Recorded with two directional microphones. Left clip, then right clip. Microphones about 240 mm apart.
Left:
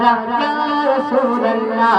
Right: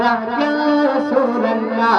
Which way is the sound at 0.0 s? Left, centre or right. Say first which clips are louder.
Left 2 dB; centre.